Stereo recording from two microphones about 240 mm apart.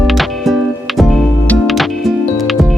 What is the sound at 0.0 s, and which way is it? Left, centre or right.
Music, centre.